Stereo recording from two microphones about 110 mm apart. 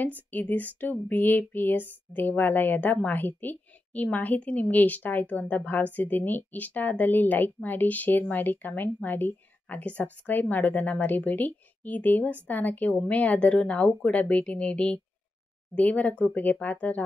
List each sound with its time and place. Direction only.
0.0 s speech: 15° left (ahead or behind)